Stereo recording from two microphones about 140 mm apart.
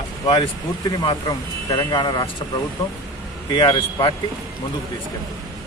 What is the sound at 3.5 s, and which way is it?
Speech, 35° left (ahead or behind).